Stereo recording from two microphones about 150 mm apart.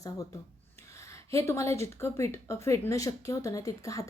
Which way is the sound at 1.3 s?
20° left (ahead or behind).